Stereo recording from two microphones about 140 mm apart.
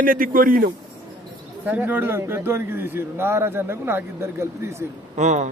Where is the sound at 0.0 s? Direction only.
85° right.